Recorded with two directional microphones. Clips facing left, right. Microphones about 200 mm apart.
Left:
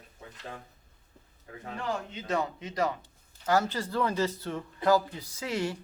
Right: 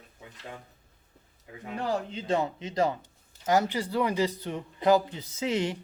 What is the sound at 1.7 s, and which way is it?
Speech, 35° right (ahead or behind).